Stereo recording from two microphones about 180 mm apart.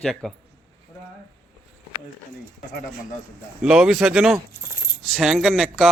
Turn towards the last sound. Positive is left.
turn(degrees=0)  # may be behind; listen again after turning